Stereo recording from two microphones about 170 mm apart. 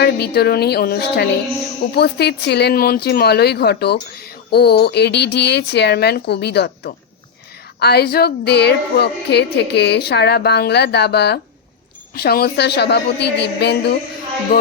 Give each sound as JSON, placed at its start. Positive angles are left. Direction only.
{"t": 0.0, "sound": "speech", "side_deg": 70}
{"t": 12.1, "sound": "a woman's voice", "side_deg": 65}